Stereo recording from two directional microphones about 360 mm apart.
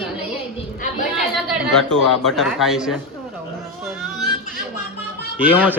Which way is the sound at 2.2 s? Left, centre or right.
Centre.